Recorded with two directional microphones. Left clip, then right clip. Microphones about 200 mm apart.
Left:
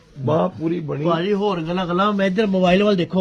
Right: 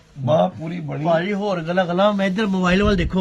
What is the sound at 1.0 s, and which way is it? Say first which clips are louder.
A man's voice: right 1 dB; 15° right (ahead or behind).